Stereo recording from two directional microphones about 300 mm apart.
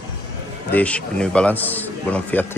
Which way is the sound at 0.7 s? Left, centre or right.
Centre.